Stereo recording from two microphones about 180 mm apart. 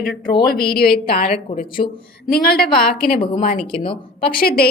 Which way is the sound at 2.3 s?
60° left (ahead or behind).